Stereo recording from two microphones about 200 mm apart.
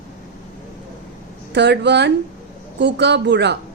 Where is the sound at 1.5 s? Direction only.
60° right (ahead or behind).